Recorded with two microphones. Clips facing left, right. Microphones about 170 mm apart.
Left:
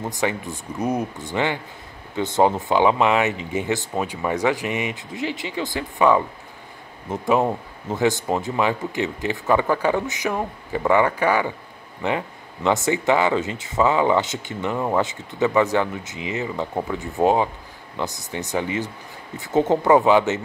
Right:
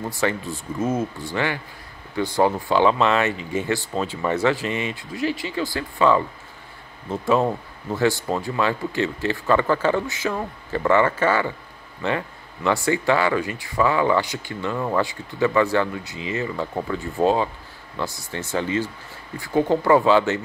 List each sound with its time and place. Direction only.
0.0 s speech: 20° left (ahead or behind)